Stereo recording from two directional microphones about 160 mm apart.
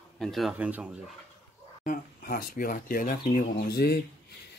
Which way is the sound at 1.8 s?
60° left (ahead or behind).